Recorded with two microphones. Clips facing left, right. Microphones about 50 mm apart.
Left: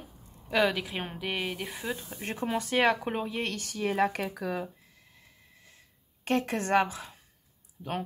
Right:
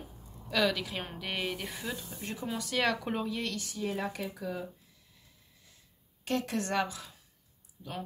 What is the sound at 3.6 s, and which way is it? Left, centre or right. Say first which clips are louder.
Speech: left 7 dB; left.